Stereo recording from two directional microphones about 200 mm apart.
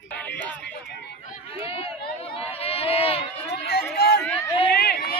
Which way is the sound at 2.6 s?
30° left (ahead or behind).